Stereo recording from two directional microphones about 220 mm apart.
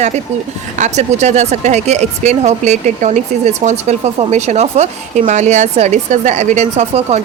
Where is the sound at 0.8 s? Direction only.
30° right (ahead or behind).